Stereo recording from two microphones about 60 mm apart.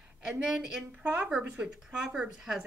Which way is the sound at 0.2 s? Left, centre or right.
Centre.